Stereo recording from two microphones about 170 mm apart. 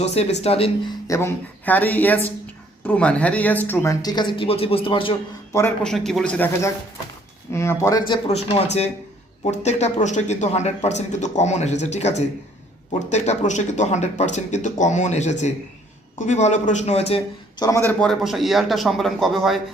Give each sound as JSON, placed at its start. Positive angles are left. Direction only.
{"t": 0.0, "sound": "speech", "side_deg": 40}
{"t": 1.0, "sound": "speech", "side_deg": 15}
{"t": 5.8, "sound": "speech", "side_deg": 0}
{"t": 7.5, "sound": "speech", "side_deg": 15}
{"t": 17.6, "sound": "speech", "side_deg": 15}
{"t": 18.0, "sound": "speech", "side_deg": 0}